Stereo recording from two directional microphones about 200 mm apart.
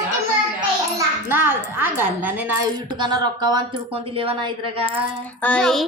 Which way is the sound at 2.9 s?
20° right (ahead or behind).